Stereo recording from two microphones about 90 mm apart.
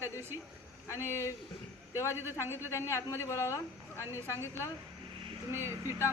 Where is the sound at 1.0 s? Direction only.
30° left (ahead or behind).